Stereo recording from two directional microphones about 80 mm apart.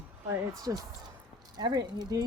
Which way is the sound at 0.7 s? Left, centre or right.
Right.